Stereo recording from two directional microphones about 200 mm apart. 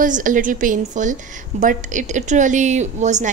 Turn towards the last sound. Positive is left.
turn(degrees=-35)  # may be behind; listen again after turning